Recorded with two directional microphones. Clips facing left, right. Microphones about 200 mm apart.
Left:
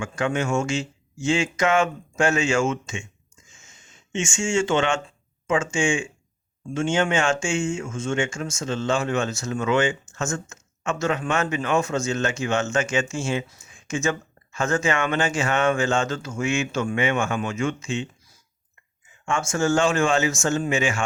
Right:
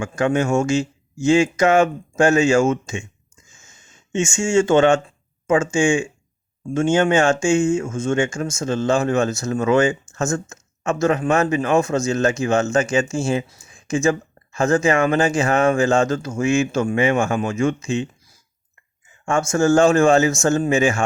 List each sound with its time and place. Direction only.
0.0 s speech: 35° right (ahead or behind)
4.1 s speech: 40° right (ahead or behind)
19.2 s speech: 40° right (ahead or behind)